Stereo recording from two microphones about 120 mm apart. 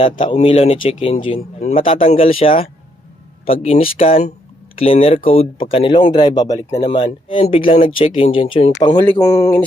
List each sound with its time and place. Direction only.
0.0 s speech: 45° left (ahead or behind)
0.3 s speech: 55° left (ahead or behind); by 7.4 s 40° left (ahead or behind)
7.4 s speech: 50° left (ahead or behind)
9.0 s speech: 25° left (ahead or behind)